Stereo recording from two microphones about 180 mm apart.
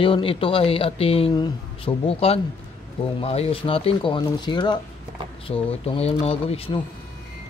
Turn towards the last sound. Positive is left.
turn(degrees=30)  # may be behind; listen again after turning